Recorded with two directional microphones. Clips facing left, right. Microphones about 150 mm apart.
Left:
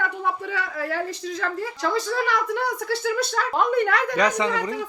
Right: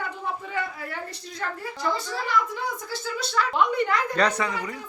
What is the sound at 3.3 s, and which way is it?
Speech, 45° left (ahead or behind).